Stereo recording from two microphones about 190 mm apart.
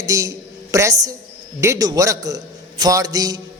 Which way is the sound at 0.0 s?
15° right (ahead or behind).